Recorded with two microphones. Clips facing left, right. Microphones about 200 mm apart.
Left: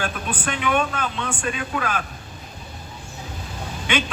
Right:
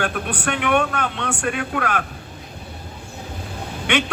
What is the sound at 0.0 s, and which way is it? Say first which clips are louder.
A man's voice: right 3 dB; 65° right (ahead or behind).